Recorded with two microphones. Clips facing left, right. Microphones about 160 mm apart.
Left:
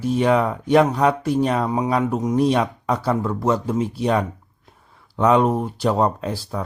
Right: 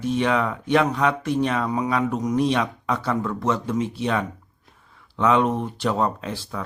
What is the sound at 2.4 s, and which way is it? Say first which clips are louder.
Speech: left 4 dB; 35° left (ahead or behind).